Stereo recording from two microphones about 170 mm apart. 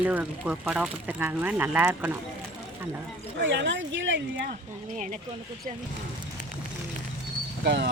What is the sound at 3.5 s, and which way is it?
A woman's voice, 90° right.